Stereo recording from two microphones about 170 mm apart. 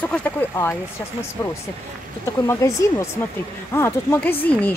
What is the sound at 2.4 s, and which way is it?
Speech, 15° left (ahead or behind).